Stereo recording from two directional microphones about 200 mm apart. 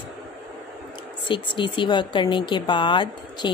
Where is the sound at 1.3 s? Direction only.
25° left (ahead or behind).